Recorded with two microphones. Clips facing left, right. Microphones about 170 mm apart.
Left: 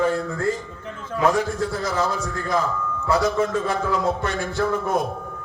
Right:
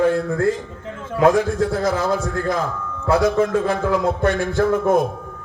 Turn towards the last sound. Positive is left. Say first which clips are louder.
# right 6 dB
turn(degrees=-50)  # may be behind; listen again after turning